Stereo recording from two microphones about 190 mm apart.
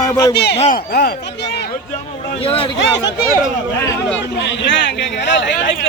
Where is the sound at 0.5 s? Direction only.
35° left (ahead or behind).